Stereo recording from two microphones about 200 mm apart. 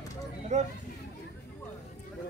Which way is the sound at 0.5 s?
35° right (ahead or behind).